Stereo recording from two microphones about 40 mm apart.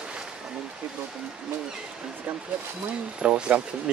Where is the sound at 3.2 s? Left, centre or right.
Right.